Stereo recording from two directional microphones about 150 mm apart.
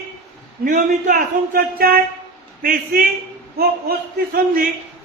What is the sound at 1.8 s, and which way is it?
Speech, 80° right.